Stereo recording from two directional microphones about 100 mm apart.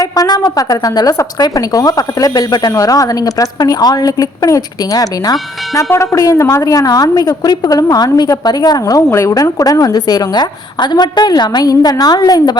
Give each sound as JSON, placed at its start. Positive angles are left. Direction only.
{"t": 0.0, "sound": "a woman's voice", "side_deg": 35}
{"t": 5.9, "sound": "a woman's voice", "side_deg": 30}